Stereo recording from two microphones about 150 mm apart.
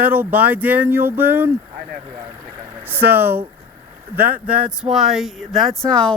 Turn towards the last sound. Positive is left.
turn(degrees=5)  # may be behind; listen again after turning